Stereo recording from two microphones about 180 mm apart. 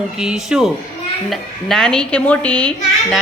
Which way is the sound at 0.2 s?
5° right (ahead or behind).